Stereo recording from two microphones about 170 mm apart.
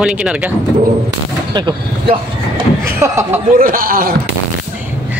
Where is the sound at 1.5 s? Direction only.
25° right (ahead or behind).